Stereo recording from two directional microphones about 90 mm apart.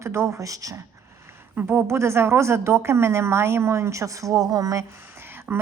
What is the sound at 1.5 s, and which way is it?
A woman's voice, 25° right (ahead or behind).